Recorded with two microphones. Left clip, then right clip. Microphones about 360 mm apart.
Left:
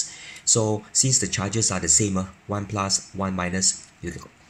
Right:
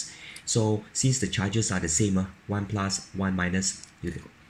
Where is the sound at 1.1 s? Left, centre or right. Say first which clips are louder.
Left 4 dB; centre.